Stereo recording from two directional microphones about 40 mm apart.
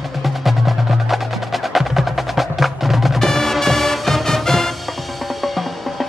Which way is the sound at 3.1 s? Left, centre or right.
Centre.